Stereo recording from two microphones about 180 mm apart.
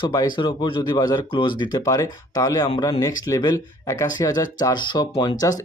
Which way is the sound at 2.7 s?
30° left (ahead or behind).